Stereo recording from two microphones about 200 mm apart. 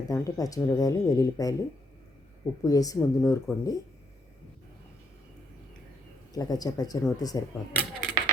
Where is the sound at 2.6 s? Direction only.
15° left (ahead or behind).